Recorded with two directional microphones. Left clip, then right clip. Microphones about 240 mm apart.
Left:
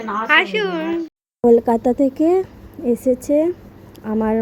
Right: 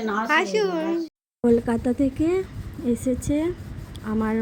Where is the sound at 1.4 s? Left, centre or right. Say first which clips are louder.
Left 8 dB; centre.